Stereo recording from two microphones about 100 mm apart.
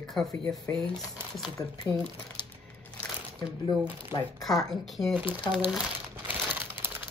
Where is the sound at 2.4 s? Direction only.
50° left (ahead or behind).